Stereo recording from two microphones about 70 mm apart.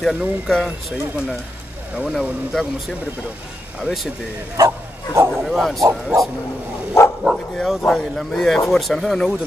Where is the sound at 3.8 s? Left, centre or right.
Centre.